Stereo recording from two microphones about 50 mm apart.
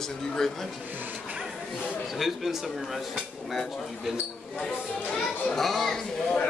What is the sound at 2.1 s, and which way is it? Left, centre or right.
Speech, centre.